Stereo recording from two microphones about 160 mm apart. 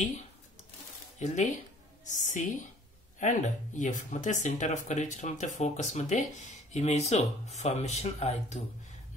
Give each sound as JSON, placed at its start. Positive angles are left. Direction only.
{"t": 1.2, "sound": "speech", "side_deg": 50}